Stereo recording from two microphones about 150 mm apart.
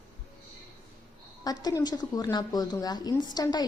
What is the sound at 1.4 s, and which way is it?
Speech, 25° left (ahead or behind).